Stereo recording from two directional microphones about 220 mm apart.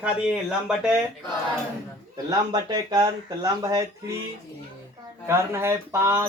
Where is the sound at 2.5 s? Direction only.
20° right (ahead or behind).